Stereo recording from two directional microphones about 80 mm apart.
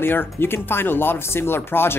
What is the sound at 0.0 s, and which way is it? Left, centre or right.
Speech, left.